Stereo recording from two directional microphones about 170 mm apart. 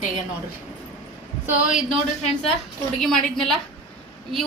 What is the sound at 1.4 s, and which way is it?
Speech, 5° right (ahead or behind).